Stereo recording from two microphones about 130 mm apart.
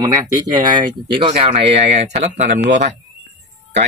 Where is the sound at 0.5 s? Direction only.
35° right (ahead or behind); by 2.9 s 65° right (ahead or behind).